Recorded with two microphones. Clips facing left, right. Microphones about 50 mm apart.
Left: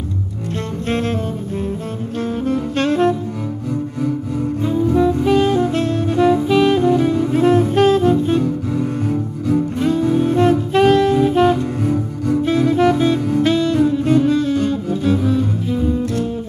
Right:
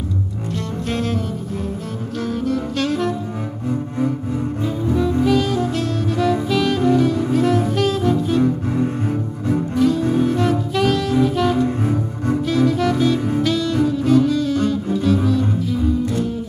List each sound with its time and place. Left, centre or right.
0.8 s double bass: left
2.2 s saxophone: left
5.2 s saxophone: left
6.5 s music: centre
9.8 s music: left
10.2 s saxophone: left
12.4 s music: left
15.2 s double bass: left